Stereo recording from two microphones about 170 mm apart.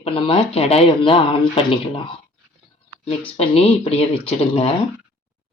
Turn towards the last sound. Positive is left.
turn(degrees=35)  # may be behind; listen again after turning